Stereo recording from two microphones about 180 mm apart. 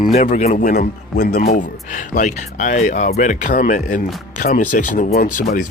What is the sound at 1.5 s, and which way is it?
Speech, 45° left (ahead or behind).